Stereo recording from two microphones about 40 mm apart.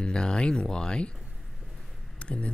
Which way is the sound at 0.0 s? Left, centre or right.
Left.